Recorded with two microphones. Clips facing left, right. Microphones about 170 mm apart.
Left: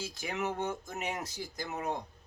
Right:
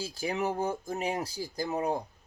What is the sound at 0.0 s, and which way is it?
Speech, 35° right (ahead or behind).